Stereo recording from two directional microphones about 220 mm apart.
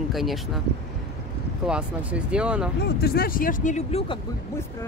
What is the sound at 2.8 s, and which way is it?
Speech, 45° left (ahead or behind).